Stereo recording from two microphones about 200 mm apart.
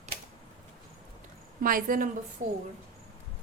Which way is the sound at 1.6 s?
45° right (ahead or behind).